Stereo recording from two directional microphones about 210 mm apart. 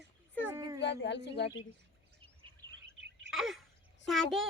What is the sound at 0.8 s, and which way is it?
Speech, 55° left (ahead or behind).